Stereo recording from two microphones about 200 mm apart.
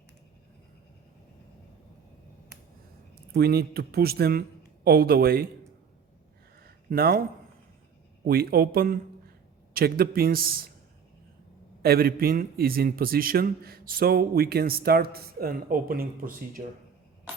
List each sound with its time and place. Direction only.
3.3 s a man's voice: 55° right (ahead or behind)
6.6 s a sound: 50° right (ahead or behind)
8.3 s a man's voice: 50° right (ahead or behind)
11.8 s a man's voice: 50° right (ahead or behind)